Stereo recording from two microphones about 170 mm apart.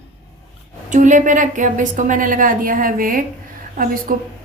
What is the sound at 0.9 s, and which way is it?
A woman's voice, 45° right (ahead or behind).